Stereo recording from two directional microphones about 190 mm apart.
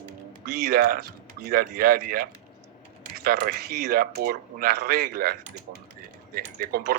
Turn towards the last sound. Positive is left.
turn(degrees=-50)  # may be behind; listen again after turning